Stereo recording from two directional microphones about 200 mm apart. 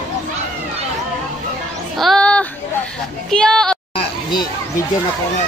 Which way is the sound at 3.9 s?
20° left (ahead or behind).